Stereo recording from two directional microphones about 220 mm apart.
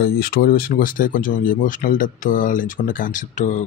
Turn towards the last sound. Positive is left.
turn(degrees=35)  # may be behind; listen again after turning